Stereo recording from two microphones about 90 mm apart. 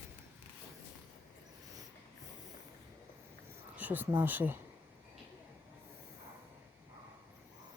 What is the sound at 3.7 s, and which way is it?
Speech, 20° right (ahead or behind).